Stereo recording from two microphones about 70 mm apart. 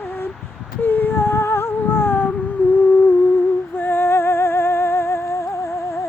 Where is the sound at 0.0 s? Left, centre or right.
Left.